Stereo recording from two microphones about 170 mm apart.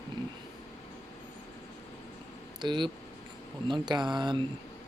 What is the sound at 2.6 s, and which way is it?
Speech, 25° right (ahead or behind).